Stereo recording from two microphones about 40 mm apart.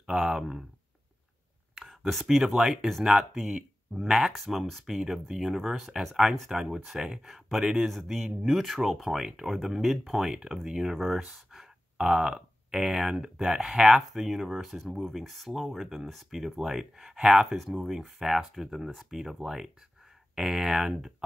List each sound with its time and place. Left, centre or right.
0.0 s speech: centre
1.9 s a sound: centre
2.2 s speech: centre
4.3 s speech: centre
4.8 s speech: centre
7.2 s speech: centre
12.0 s speech: centre
14.0 s speech: centre